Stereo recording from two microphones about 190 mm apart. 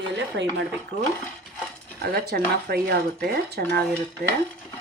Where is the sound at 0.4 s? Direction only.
70° right (ahead or behind).